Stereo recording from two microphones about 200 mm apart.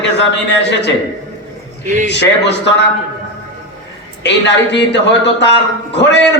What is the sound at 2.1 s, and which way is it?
Speech, 60° left (ahead or behind).